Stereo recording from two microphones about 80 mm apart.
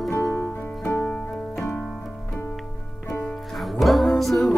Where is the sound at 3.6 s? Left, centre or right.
Centre.